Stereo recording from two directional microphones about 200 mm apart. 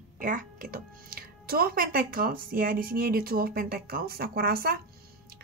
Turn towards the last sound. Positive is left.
turn(degrees=-50)  # may be behind; listen again after turning